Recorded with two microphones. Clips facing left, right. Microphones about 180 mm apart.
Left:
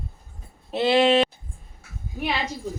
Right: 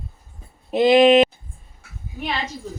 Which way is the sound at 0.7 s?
15° right (ahead or behind).